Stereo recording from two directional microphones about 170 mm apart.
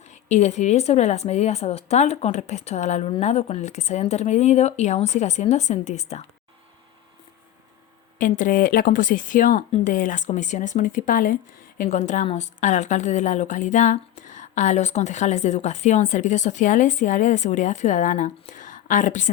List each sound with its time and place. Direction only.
0.1 s a woman's voice: 40° left (ahead or behind)
8.2 s a woman's voice: 50° left (ahead or behind)
9.6 s a woman's voice: 35° left (ahead or behind)
9.9 s a woman's voice: 50° left (ahead or behind)